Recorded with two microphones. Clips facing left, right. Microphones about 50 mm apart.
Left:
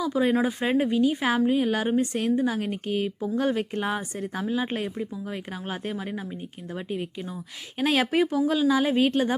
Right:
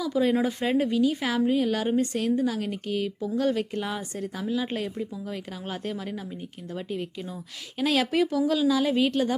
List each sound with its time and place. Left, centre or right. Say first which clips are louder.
0.0 s speech: left 1 dB; centre
1.4 s speech: right 1 dB; centre
1.6 s speech: left 1 dB; left
7.8 s speech: left 1 dB; left